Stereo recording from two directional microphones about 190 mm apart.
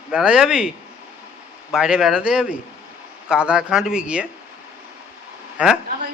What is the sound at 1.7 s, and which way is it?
Speech, 5° right (ahead or behind).